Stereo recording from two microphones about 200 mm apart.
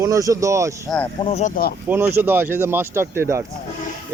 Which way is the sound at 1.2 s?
35° left (ahead or behind).